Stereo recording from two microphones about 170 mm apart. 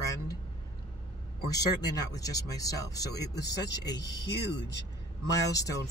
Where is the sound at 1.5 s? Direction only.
20° left (ahead or behind).